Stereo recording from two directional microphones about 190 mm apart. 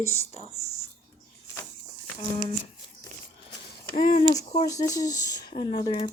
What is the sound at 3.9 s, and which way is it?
Speech, 45° left (ahead or behind).